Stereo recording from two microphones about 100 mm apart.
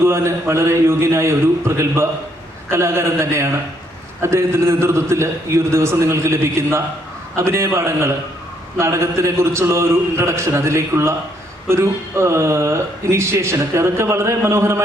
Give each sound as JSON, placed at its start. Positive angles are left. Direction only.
{"t": 0.0, "sound": "speech", "side_deg": -25}